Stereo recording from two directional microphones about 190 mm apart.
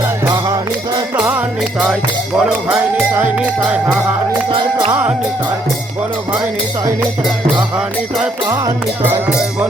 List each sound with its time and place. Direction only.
0.3 s music: 15° right (ahead or behind)
1.2 s music: 10° right (ahead or behind)
2.4 s speech: 10° right (ahead or behind)
4.9 s music: 10° right (ahead or behind)
7.8 s music: 10° right (ahead or behind)